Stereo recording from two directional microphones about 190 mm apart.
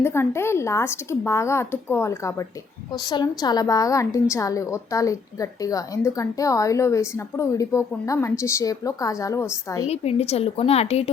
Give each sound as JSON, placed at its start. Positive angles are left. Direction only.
{"t": 0.0, "sound": "a woman's voice", "side_deg": 15}
{"t": 9.9, "sound": "a woman's voice", "side_deg": 35}